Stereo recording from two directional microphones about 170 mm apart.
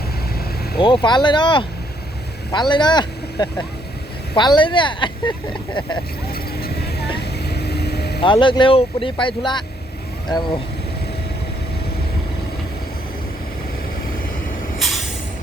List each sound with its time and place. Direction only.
0.8 s speech: 30° left (ahead or behind)
6.3 s vehicle: 65° left (ahead or behind)
8.2 s speech: 30° left (ahead or behind)
14.8 s vehicle: centre (ahead or behind)